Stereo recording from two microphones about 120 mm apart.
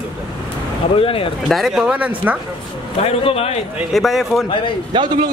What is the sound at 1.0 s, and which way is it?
Speech, 50° left (ahead or behind).